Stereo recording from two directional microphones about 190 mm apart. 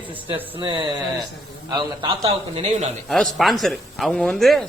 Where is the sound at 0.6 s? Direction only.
25° right (ahead or behind).